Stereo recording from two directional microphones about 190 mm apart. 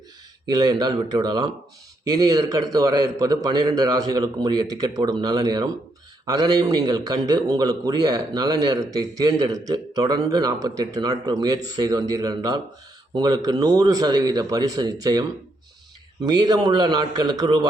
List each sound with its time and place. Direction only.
0.5 s a man's voice: 20° right (ahead or behind)